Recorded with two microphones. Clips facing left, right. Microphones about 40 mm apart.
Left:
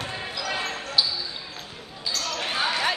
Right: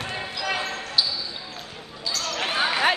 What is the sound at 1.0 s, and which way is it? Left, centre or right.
Basketball bounce, centre.